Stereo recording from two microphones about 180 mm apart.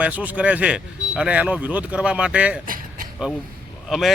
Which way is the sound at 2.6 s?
50° right (ahead or behind).